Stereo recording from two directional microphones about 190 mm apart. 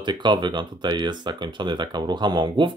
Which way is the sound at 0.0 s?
25° right (ahead or behind).